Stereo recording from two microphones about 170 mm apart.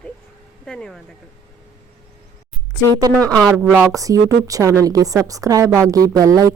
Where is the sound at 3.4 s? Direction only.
5° right (ahead or behind).